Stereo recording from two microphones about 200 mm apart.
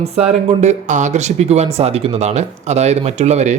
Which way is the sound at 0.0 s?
30° right (ahead or behind).